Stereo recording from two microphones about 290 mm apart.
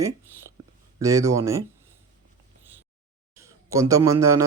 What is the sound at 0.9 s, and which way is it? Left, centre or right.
Speech, centre.